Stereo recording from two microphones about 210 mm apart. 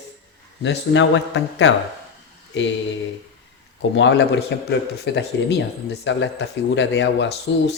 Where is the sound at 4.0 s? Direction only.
55° left (ahead or behind).